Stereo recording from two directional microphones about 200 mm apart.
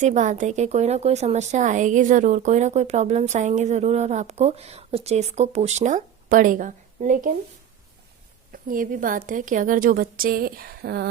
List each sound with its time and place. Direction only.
0.0 s a woman's voice: 35° right (ahead or behind)
8.5 s a woman's voice: 45° right (ahead or behind)